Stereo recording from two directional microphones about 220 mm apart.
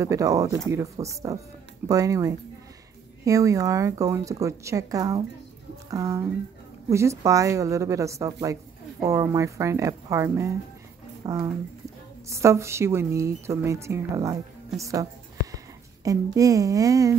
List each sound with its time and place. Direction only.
0.0 s a woman's voice: 15° right (ahead or behind)